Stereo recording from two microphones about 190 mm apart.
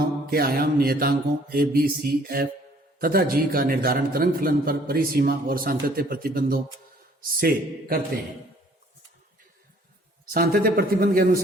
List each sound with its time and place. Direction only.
0.3 s a man's voice: 50° right (ahead or behind)
10.2 s a man's voice: 50° right (ahead or behind)